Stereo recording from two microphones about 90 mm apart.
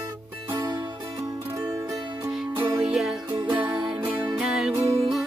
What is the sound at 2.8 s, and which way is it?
Music, 5° right (ahead or behind).